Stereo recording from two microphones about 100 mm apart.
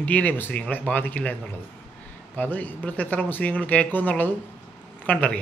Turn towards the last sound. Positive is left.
turn(degrees=10)  # may be behind; listen again after turning